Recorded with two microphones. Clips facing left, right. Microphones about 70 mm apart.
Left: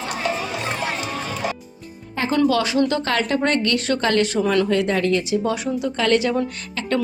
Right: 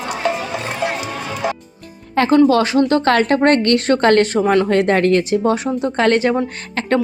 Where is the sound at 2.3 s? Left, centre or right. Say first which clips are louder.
Right 6 dB; right.